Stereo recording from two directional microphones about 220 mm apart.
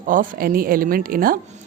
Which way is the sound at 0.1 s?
40° right (ahead or behind).